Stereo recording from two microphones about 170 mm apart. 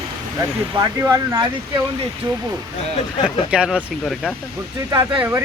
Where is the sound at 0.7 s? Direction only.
20° right (ahead or behind).